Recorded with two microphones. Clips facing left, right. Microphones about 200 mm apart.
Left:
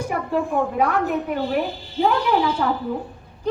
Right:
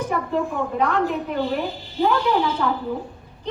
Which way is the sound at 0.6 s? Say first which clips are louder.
Left 4 dB; 50° left (ahead or behind).